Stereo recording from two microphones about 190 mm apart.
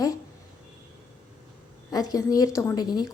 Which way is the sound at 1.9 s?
20° left (ahead or behind).